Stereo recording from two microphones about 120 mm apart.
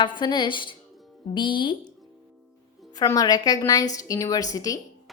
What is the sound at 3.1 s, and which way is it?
A woman's voice, 30° left (ahead or behind).